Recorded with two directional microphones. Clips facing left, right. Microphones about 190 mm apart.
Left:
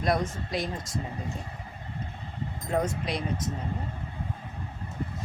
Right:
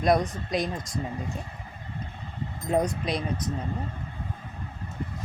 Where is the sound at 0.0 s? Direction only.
20° right (ahead or behind).